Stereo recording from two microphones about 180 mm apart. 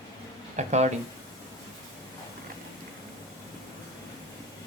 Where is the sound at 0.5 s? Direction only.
40° right (ahead or behind).